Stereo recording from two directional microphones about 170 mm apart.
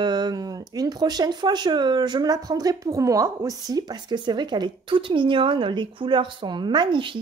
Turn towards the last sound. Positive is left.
turn(degrees=-30)  # may be behind; listen again after turning